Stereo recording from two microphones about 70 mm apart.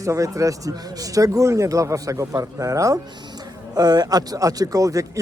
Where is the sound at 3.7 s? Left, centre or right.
Right.